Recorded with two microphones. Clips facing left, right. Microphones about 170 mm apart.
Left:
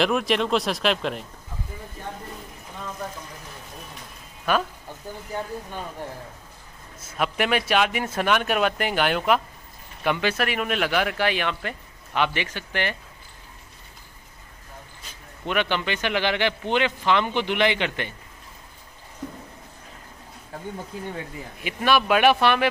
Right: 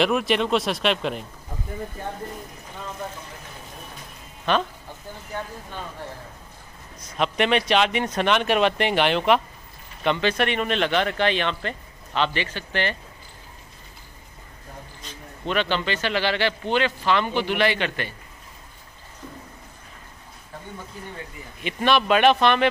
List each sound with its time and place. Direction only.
0.0 s speech: centre (ahead or behind)
4.5 s speech: 5° left (ahead or behind)
7.2 s speech: 5° left (ahead or behind)
15.4 s speech: 15° left (ahead or behind)
21.6 s speech: 5° left (ahead or behind)